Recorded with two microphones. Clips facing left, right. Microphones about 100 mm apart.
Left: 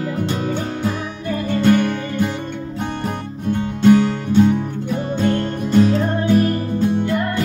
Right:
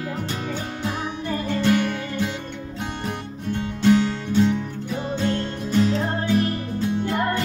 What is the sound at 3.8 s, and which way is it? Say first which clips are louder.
Music: left 5 dB; 50° left (ahead or behind).